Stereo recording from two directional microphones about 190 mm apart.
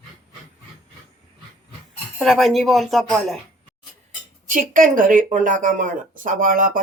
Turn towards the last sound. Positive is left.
turn(degrees=-45)  # may be behind; listen again after turning